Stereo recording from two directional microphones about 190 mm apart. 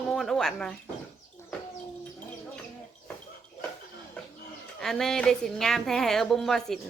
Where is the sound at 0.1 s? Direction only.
Centre (ahead or behind).